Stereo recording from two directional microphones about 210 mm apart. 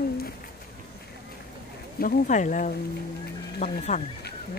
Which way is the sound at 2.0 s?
40° left (ahead or behind).